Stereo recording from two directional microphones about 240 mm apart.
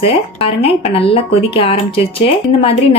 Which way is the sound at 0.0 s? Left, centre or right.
Left.